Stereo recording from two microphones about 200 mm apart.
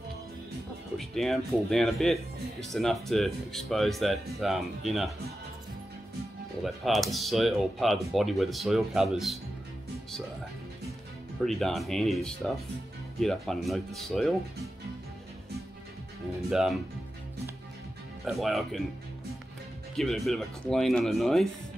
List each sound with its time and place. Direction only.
0.9 s speech: centre (ahead or behind)
6.6 s speech: centre (ahead or behind)
11.4 s speech: centre (ahead or behind)
16.4 s speech: centre (ahead or behind)
18.2 s speech: centre (ahead or behind)
20.0 s speech: centre (ahead or behind)